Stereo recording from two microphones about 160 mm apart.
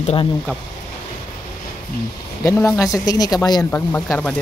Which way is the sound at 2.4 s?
15° left (ahead or behind).